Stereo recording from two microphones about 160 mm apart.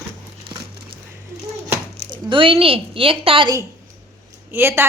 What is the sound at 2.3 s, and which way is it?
A woman's voice, 35° right (ahead or behind).